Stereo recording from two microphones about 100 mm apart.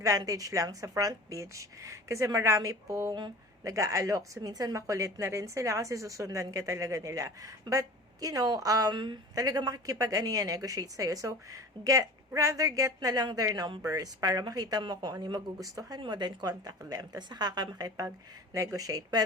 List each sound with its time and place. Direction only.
0.0 s a woman's voice: 35° right (ahead or behind)
15.6 s a woman's voice: 35° right (ahead or behind)
16.0 s a woman's voice: 45° right (ahead or behind)